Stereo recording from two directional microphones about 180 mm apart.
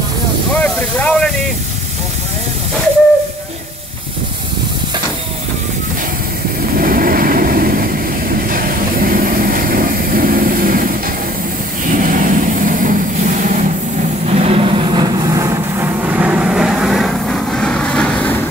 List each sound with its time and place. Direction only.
0.5 s a sound: 10° left (ahead or behind)
6.8 s vehicle: 50° right (ahead or behind)
11.9 s vehicle: 50° right (ahead or behind)
14.2 s vehicle: 35° right (ahead or behind); by 18.3 s 5° left (ahead or behind)